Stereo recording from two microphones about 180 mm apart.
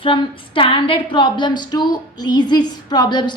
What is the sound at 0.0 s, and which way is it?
A woman's voice, 30° left (ahead or behind).